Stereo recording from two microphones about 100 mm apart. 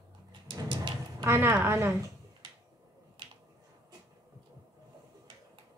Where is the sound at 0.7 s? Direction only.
55° right (ahead or behind).